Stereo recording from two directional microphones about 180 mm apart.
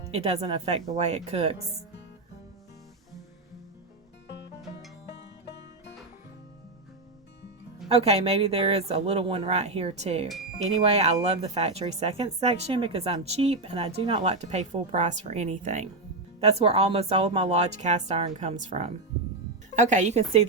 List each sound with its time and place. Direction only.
0.1 s speech: 35° right (ahead or behind)
7.9 s speech: 35° right (ahead or behind)
10.2 s speech: centre (ahead or behind)
10.8 s speech: 35° right (ahead or behind)